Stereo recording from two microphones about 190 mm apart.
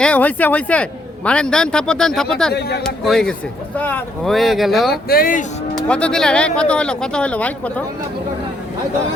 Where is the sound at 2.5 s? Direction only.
60° left (ahead or behind).